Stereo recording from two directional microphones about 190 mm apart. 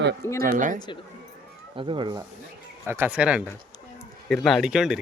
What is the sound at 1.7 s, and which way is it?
Speech, 25° right (ahead or behind).